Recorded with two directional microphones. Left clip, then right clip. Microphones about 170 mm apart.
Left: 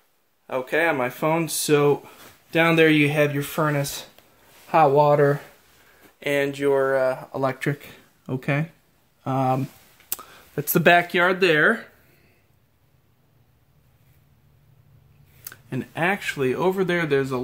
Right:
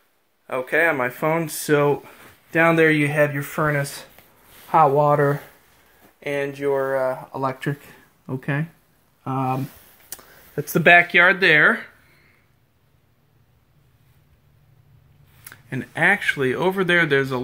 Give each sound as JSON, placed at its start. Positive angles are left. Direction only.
{"t": 0.5, "sound": "speech", "side_deg": 35}
{"t": 3.4, "sound": "speech", "side_deg": 35}
{"t": 6.1, "sound": "speech", "side_deg": 55}
{"t": 7.0, "sound": "speech", "side_deg": 35}
{"t": 9.2, "sound": "speech", "side_deg": 50}
{"t": 10.1, "sound": "speech", "side_deg": 30}
{"t": 15.4, "sound": "speech", "side_deg": 20}